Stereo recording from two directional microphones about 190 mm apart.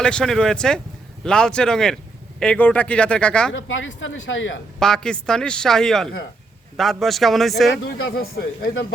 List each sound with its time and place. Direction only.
0.0 s a man's voice: 5° left (ahead or behind)
3.5 s speech: 85° left
4.8 s a man's voice: 5° left (ahead or behind)
7.9 s speech: 55° left (ahead or behind)